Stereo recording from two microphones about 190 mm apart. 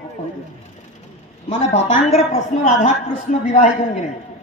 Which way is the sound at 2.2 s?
35° left (ahead or behind).